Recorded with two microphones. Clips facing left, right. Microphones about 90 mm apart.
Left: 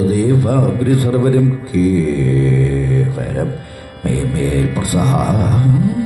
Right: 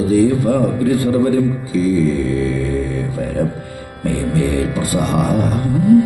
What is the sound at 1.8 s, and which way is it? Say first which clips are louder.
Mantra: left 1 dB; 50° left (ahead or behind).